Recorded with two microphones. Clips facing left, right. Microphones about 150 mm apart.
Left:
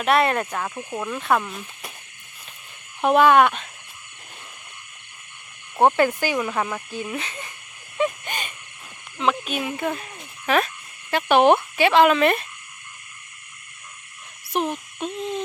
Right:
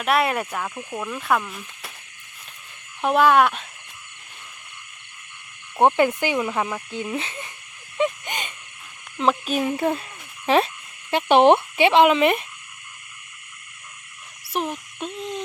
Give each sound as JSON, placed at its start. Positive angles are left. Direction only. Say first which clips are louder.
{"t": 0.0, "sound": "speech", "louder": "left 2 dB", "side_deg": 0}
{"t": 3.0, "sound": "speech", "louder": "left 2 dB", "side_deg": 0}
{"t": 5.8, "sound": "speech", "louder": "even", "side_deg": -20}
{"t": 7.9, "sound": "a sound", "louder": "right 1 dB", "side_deg": -20}
{"t": 9.2, "sound": "speech", "louder": "right 3 dB", "side_deg": -40}
{"t": 10.4, "sound": "frog", "louder": "right 2 dB", "side_deg": -25}
{"t": 11.1, "sound": "speech", "louder": "right 1 dB", "side_deg": -25}
{"t": 14.5, "sound": "hoot", "louder": "left 2 dB", "side_deg": 0}